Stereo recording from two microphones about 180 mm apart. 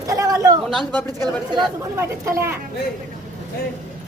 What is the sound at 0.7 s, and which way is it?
Speech, 5° left (ahead or behind).